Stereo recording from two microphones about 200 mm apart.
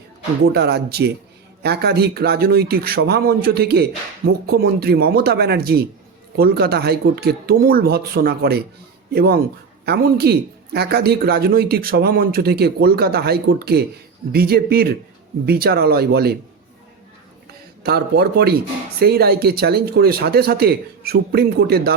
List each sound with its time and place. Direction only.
0.5 s a man's voice: 55° right (ahead or behind)
17.8 s a man's voice: 50° right (ahead or behind)